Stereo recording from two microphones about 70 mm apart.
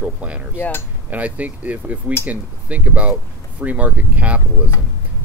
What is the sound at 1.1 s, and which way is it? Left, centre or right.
Speech, right.